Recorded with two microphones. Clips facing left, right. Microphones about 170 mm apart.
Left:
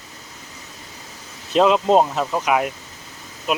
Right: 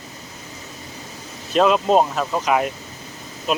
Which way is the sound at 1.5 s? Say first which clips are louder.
Left 1 dB; 20° left (ahead or behind).